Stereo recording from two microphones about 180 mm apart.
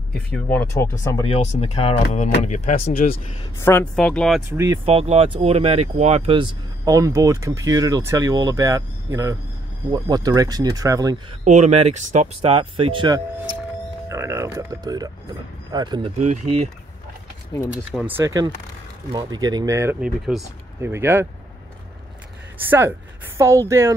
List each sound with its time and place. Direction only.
0.5 s speech: 10° left (ahead or behind)
1.2 s speech: 35° left (ahead or behind)
3.5 s speech: 10° left (ahead or behind)
4.8 s speech: 35° right (ahead or behind)
11.4 s speech: 40° right (ahead or behind)
14.0 s speech: 15° right (ahead or behind)
16.2 s speech: 40° right (ahead or behind)
17.5 s speech: 20° left (ahead or behind)
17.9 s speech: 10° right (ahead or behind)
22.7 s speech: 10° right (ahead or behind)